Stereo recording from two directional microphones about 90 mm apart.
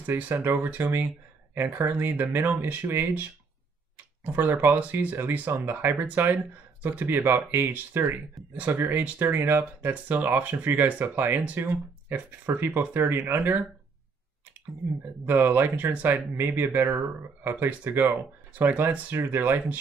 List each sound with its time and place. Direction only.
0.0 s speech: 25° right (ahead or behind)
15.2 s speech: 25° right (ahead or behind)